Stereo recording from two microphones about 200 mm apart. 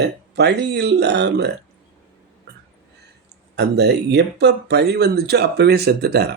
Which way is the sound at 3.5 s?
55° right (ahead or behind).